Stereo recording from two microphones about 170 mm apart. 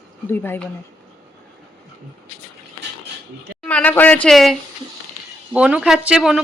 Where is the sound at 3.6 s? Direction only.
10° left (ahead or behind).